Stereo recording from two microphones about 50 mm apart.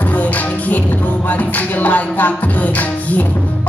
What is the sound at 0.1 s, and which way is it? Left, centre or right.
Music, left.